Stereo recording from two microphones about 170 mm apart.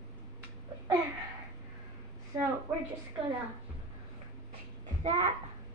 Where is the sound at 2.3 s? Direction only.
25° right (ahead or behind).